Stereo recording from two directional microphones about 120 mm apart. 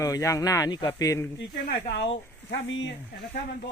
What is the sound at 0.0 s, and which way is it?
Speech, 25° left (ahead or behind).